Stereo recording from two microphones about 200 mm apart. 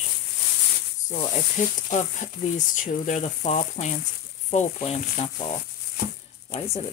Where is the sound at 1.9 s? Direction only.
40° left (ahead or behind).